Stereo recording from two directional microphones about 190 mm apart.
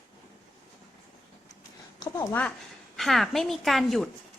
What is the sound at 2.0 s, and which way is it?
Speech, 20° left (ahead or behind).